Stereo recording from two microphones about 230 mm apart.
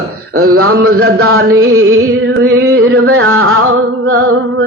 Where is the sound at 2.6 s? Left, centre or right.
Right.